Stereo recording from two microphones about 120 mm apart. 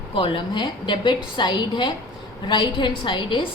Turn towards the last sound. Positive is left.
turn(degrees=40)  # may be behind; listen again after turning